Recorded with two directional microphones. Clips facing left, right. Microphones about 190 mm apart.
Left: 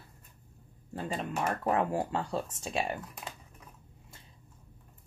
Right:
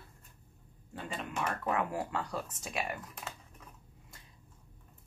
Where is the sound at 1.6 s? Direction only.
30° left (ahead or behind).